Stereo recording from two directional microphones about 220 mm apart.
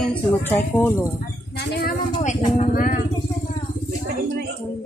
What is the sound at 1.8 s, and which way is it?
Vehicle, 35° left (ahead or behind).